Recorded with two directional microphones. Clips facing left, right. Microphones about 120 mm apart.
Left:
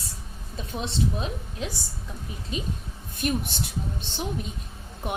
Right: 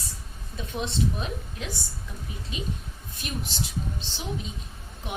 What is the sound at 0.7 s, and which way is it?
Speech, 30° left (ahead or behind).